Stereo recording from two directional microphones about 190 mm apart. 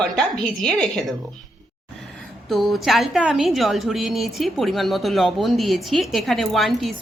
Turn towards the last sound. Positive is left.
turn(degrees=0)  # may be behind; listen again after turning